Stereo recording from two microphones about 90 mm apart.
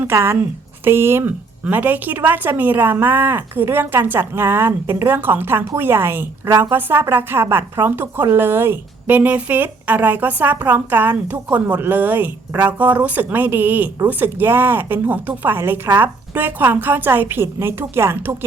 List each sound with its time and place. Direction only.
0.1 s a woman's voice: 30° right (ahead or behind)